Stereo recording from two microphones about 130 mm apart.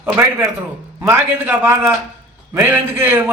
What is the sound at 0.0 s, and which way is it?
A man's voice, 15° right (ahead or behind).